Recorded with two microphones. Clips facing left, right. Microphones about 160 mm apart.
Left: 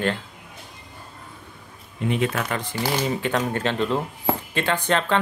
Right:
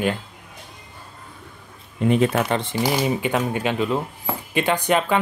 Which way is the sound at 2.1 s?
35° right (ahead or behind).